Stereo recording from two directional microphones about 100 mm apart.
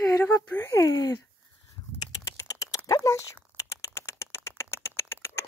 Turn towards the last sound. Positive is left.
turn(degrees=25)  # may be behind; listen again after turning